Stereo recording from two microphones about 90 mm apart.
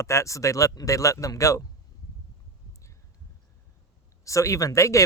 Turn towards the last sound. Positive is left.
turn(degrees=35)  # may be behind; listen again after turning